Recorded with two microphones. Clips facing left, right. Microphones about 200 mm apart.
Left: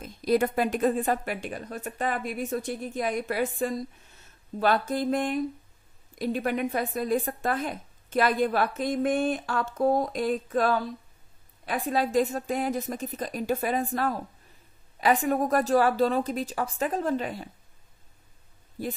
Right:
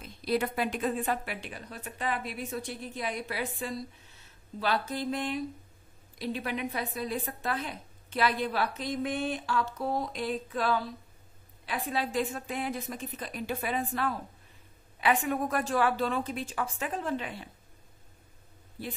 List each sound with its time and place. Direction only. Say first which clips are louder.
0.0 s a woman's voice: left 6 dB; 45° left (ahead or behind)
18.8 s a woman's voice: left 6 dB; 45° left (ahead or behind)